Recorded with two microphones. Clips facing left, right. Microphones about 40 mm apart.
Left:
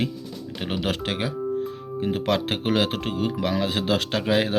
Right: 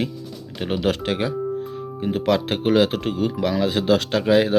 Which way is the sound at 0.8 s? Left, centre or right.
Left.